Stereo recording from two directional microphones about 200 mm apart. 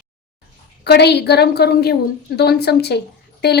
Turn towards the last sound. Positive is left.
turn(degrees=55)  # may be behind; listen again after turning